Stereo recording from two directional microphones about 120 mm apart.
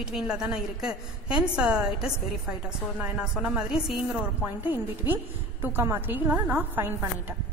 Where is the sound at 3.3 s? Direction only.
5° right (ahead or behind).